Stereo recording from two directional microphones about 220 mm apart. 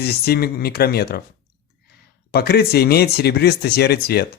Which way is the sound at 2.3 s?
45° left (ahead or behind).